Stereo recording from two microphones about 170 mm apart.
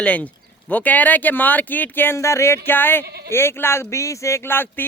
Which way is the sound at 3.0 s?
70° right (ahead or behind).